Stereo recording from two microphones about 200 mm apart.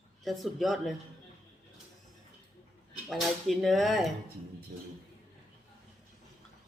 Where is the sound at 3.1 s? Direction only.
Centre (ahead or behind).